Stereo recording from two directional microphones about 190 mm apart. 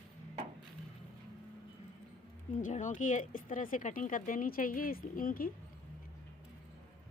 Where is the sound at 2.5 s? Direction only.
40° left (ahead or behind).